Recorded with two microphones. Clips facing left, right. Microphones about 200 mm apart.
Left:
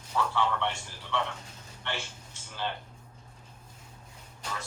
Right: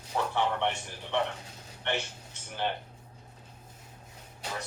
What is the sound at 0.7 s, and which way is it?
Speech, 60° right (ahead or behind).